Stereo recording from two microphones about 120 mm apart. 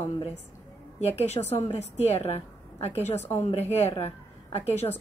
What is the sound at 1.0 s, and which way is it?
A woman's voice, 60° left (ahead or behind).